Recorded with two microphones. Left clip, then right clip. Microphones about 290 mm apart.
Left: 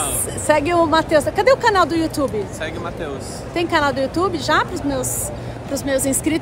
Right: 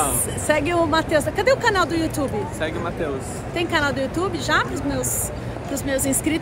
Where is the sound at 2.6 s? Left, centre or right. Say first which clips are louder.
Right 1 dB; centre.